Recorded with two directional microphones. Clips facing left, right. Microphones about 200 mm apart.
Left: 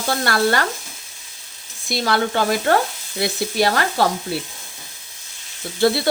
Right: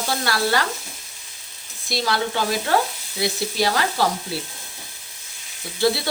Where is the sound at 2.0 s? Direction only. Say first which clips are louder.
Left 4 dB; 55° left (ahead or behind).